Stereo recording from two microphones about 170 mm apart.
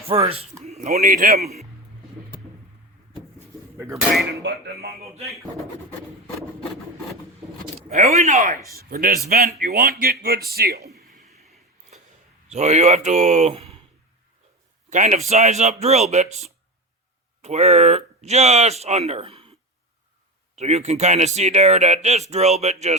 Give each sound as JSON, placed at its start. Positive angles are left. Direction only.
{"t": 0.1, "sound": "speech", "side_deg": -35}
{"t": 0.6, "sound": "a sound", "side_deg": -40}
{"t": 1.0, "sound": "speech", "side_deg": -60}
{"t": 4.4, "sound": "music", "side_deg": -70}
{"t": 7.9, "sound": "speech", "side_deg": -40}
{"t": 8.7, "sound": "speech", "side_deg": -60}
{"t": 11.3, "sound": "a sound", "side_deg": 0}
{"t": 12.5, "sound": "speech", "side_deg": -40}
{"t": 14.8, "sound": "speech", "side_deg": -45}
{"t": 20.6, "sound": "speech", "side_deg": -40}